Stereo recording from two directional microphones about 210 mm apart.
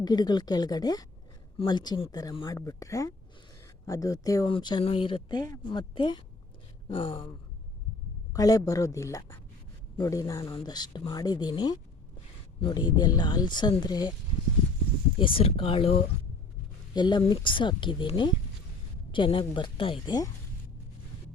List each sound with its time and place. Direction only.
0.0 s speech: 20° left (ahead or behind)
8.3 s speech: 15° left (ahead or behind)
15.2 s speech: 25° left (ahead or behind)